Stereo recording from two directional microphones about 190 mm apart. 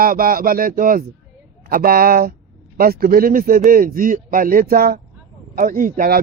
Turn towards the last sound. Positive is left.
turn(degrees=-45)  # may be behind; listen again after turning